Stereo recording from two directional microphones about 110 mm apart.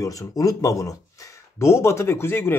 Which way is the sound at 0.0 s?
30° left (ahead or behind).